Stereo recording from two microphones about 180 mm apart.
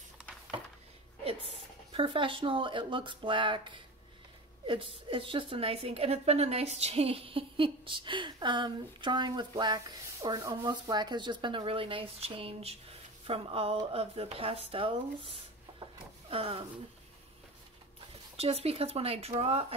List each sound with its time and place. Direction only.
1.9 s a woman's voice: 30° right (ahead or behind)
15.8 s a sound: 30° right (ahead or behind)
18.3 s speech: 35° right (ahead or behind)